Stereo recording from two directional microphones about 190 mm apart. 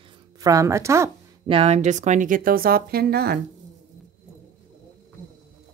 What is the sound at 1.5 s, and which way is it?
Speech, 35° right (ahead or behind).